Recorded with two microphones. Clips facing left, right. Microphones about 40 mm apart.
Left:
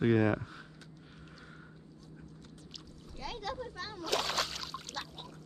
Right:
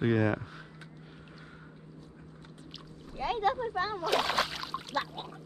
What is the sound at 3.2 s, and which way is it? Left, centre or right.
Speech, right.